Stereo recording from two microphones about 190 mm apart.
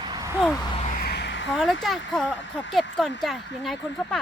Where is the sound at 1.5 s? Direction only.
Centre (ahead or behind).